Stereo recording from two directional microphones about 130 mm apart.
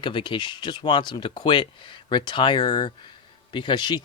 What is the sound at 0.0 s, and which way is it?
Speech, 40° left (ahead or behind).